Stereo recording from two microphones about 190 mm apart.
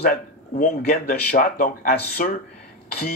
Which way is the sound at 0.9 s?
45° left (ahead or behind).